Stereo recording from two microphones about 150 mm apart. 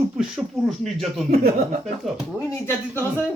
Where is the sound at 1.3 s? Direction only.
90° right.